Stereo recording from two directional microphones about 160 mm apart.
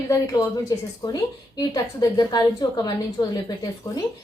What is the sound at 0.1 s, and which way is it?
A woman's voice, 20° left (ahead or behind).